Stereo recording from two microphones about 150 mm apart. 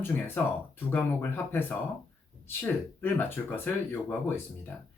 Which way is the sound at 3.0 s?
15° left (ahead or behind).